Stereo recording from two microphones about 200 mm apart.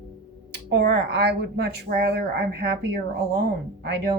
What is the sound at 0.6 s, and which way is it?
Speech, 55° right (ahead or behind).